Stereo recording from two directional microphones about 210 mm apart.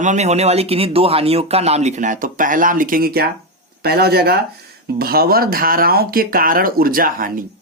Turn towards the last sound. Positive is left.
turn(degrees=-40)  # may be behind; listen again after turning